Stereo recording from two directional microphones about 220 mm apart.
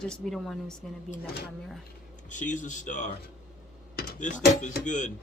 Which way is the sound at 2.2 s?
35° left (ahead or behind).